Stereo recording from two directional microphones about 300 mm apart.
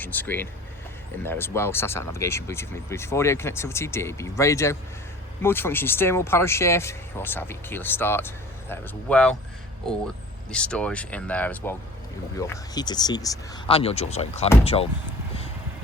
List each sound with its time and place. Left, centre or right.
0.0 s speech: centre
10.5 s speech: centre